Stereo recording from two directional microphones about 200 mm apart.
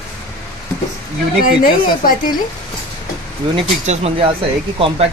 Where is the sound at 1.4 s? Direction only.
45° left (ahead or behind).